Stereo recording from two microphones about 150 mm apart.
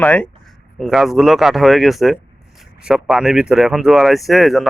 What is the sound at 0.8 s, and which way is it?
Speech, centre (ahead or behind).